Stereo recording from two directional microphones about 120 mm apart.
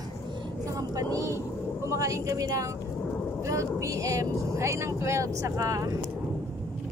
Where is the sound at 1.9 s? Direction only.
25° right (ahead or behind).